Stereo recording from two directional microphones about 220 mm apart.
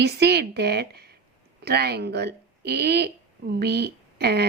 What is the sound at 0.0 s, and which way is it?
Speech, 50° right (ahead or behind).